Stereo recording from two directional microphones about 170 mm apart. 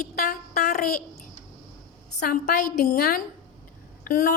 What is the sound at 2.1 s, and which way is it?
A woman's voice, 60° left (ahead or behind).